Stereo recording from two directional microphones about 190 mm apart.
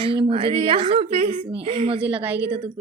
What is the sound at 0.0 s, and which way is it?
A woman's voice, 30° right (ahead or behind).